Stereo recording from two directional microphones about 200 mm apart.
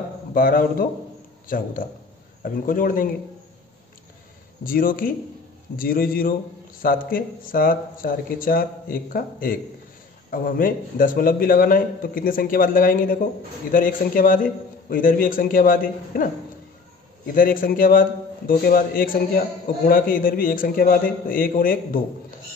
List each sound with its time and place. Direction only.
0.3 s a man's voice: 45° left (ahead or behind)
4.6 s a man's voice: 45° left (ahead or behind)
17.3 s a man's voice: 45° left (ahead or behind)